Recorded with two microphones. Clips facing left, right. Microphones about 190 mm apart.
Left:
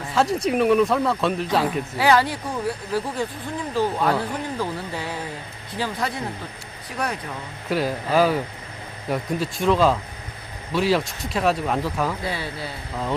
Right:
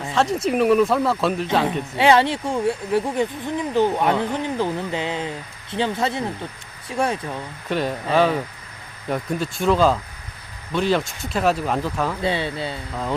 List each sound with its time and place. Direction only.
0.1 s speech: centre (ahead or behind)
2.0 s speech: 25° right (ahead or behind)
7.7 s speech: centre (ahead or behind)
12.2 s speech: 25° right (ahead or behind)